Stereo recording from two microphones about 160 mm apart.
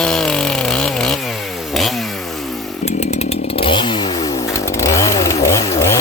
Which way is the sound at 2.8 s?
45° left (ahead or behind).